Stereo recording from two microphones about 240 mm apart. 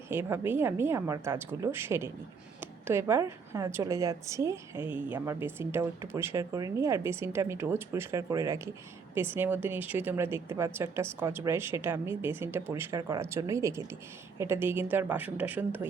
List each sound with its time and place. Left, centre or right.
0.1 s a woman's voice: centre